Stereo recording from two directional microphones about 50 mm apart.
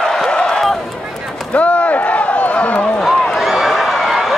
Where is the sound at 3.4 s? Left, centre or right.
Centre.